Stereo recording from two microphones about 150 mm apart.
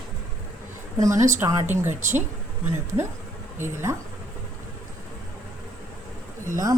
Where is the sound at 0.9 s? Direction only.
20° right (ahead or behind).